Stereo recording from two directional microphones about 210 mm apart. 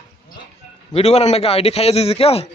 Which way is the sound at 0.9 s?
30° left (ahead or behind).